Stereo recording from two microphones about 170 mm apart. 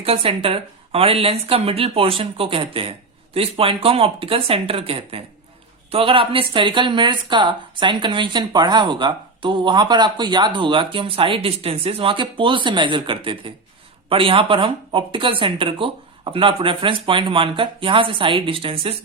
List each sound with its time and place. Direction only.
0.0 s speech: 35° right (ahead or behind)